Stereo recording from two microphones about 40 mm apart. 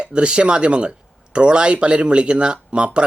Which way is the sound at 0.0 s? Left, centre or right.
Right.